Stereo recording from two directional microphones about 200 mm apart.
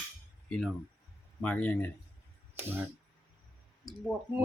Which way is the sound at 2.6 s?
10° right (ahead or behind).